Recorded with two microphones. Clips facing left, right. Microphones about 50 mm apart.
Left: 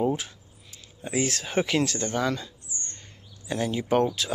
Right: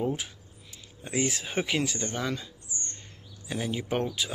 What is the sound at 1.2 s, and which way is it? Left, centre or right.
Speech, centre.